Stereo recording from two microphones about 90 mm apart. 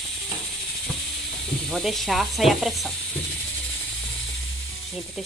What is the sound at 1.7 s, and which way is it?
Speech, centre (ahead or behind).